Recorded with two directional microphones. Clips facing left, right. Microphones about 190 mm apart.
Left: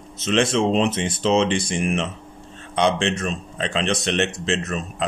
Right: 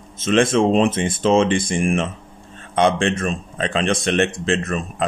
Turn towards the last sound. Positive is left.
turn(degrees=-50)  # may be behind; listen again after turning